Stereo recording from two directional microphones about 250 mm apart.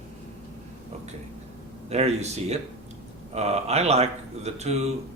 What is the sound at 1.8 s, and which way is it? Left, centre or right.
A man's voice, right.